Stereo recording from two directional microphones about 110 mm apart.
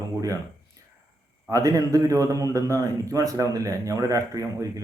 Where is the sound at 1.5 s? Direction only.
30° right (ahead or behind).